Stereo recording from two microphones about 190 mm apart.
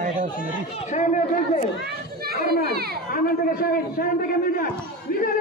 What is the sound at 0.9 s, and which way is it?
Speech, 40° left (ahead or behind).